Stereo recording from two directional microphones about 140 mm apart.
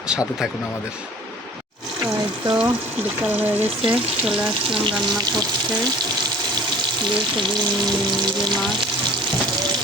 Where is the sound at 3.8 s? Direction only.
40° right (ahead or behind).